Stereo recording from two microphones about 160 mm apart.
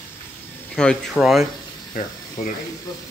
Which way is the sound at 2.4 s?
50° left (ahead or behind).